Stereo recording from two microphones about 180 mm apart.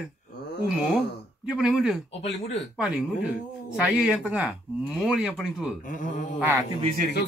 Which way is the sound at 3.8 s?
5° right (ahead or behind).